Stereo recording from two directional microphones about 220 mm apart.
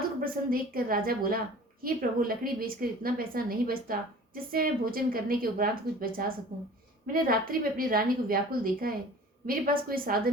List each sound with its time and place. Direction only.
0.2 s a woman's voice: 40° right (ahead or behind)